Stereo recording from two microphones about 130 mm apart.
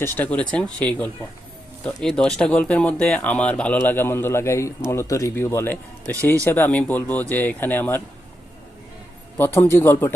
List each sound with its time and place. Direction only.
0.0 s speech: 15° left (ahead or behind)
9.4 s speech: 20° left (ahead or behind)